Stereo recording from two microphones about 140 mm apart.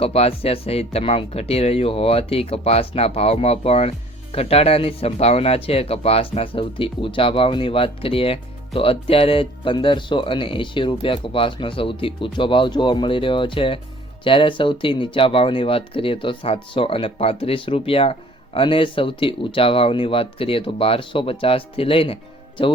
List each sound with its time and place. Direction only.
0.0 s speech: 45° left (ahead or behind)